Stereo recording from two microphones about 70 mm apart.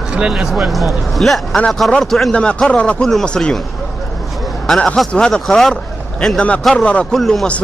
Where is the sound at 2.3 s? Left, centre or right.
Centre.